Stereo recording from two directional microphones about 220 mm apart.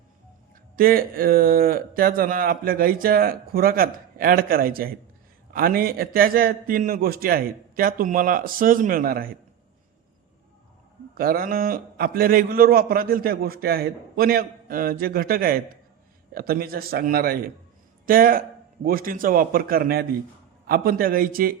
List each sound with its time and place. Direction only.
0.8 s a man's voice: 40° right (ahead or behind)
11.2 s a man's voice: 40° right (ahead or behind)